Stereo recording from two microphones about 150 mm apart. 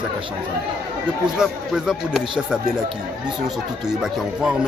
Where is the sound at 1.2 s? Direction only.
5° right (ahead or behind).